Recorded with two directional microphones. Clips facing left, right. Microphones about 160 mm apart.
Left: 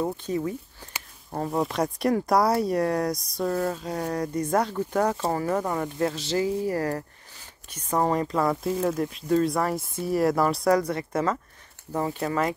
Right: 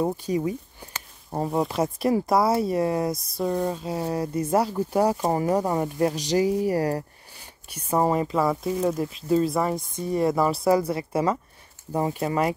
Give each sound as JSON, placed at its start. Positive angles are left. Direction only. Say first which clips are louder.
{"t": 0.0, "sound": "speech", "louder": "right 3 dB", "side_deg": -15}
{"t": 1.5, "sound": "speech", "louder": "right 1 dB", "side_deg": 0}